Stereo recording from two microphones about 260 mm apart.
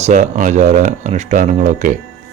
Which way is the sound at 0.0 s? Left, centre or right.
Right.